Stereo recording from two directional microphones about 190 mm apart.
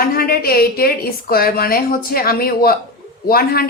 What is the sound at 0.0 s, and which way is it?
A woman's voice, 50° left (ahead or behind).